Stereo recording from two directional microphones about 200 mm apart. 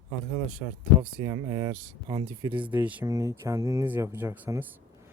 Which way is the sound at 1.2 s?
20° right (ahead or behind).